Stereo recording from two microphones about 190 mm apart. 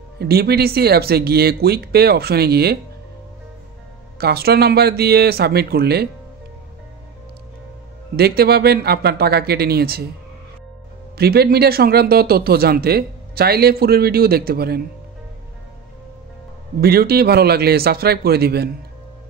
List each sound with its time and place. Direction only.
0.2 s speech: 55° right (ahead or behind)
4.2 s speech: 55° right (ahead or behind)
8.2 s speech: 55° right (ahead or behind)
11.1 s speech: 55° right (ahead or behind)
16.8 s speech: 55° right (ahead or behind)